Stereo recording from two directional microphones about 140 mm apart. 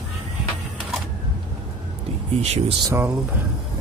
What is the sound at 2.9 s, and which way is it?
Speech, 25° right (ahead or behind).